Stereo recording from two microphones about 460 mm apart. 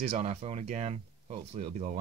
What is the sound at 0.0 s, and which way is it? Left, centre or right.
Speech, centre.